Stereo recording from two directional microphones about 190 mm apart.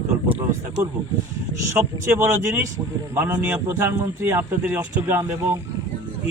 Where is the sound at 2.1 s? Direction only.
15° right (ahead or behind).